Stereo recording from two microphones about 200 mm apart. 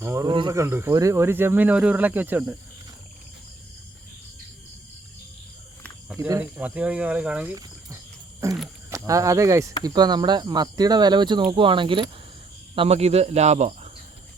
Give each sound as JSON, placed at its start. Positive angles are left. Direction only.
{"t": 0.0, "sound": "speech", "side_deg": -15}
{"t": 6.1, "sound": "speech", "side_deg": -15}